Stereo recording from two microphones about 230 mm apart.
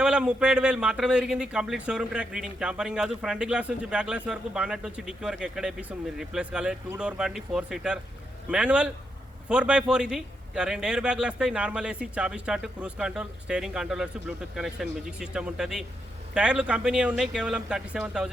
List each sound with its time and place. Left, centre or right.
0.0 s speech: centre